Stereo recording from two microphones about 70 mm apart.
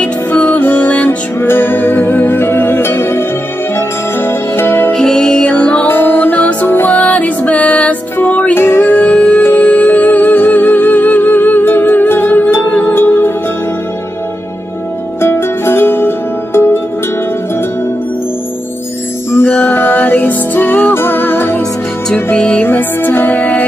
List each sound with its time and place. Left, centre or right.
0.0 s music: centre
4.9 s music: centre
5.9 s music: left
6.9 s music: centre
7.2 s music: left
8.5 s music: left
15.2 s music: left
19.3 s music: left
22.1 s music: centre